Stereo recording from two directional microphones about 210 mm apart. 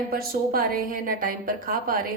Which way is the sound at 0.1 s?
45° right (ahead or behind).